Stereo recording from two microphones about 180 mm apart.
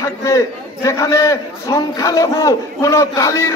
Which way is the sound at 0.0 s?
15° left (ahead or behind).